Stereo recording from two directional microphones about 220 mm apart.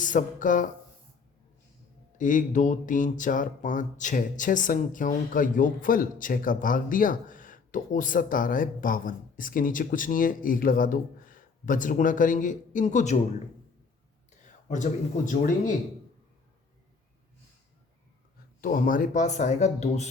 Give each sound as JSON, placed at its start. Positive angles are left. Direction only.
{"t": 0.0, "sound": "speech", "side_deg": 35}
{"t": 2.1, "sound": "speech", "side_deg": 35}
{"t": 14.3, "sound": "speech", "side_deg": 35}
{"t": 18.6, "sound": "speech", "side_deg": 40}